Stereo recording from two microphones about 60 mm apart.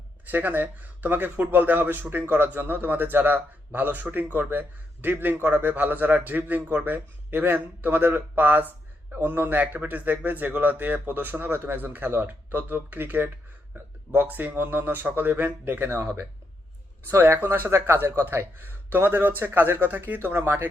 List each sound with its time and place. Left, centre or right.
0.3 s speech: right
17.1 s speech: right
20.1 s speech: right